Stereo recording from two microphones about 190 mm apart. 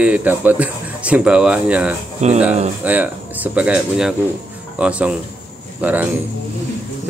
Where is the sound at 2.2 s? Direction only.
35° right (ahead or behind).